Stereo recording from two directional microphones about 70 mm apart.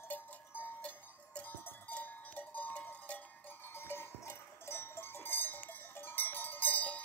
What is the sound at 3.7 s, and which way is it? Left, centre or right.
Cowbell, left.